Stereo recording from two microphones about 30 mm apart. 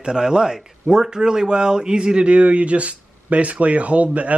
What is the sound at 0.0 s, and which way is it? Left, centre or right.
Speech, right.